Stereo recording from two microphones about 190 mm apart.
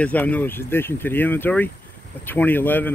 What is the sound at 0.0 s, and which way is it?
Speech, 10° left (ahead or behind).